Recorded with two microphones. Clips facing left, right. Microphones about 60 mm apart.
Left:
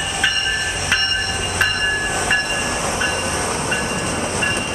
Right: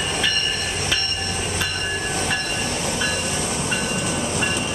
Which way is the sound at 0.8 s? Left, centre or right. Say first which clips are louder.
Left 5 dB; left.